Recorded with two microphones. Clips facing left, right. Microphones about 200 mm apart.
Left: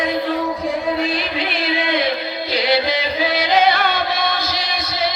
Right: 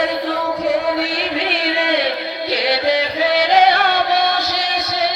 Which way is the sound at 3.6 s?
70° right (ahead or behind).